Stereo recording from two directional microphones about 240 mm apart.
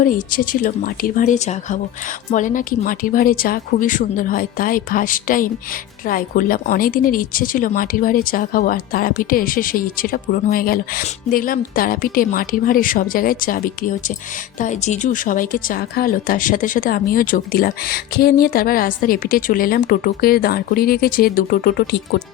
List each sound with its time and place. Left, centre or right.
0.0 s a woman's voice: left